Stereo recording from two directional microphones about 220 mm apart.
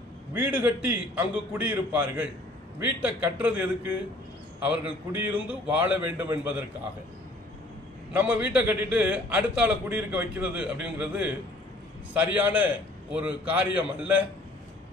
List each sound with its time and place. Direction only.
0.3 s a man's voice: 5° right (ahead or behind)
8.1 s a man's voice: 5° right (ahead or behind)